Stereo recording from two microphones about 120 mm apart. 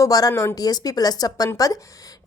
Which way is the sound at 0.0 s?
30° left (ahead or behind).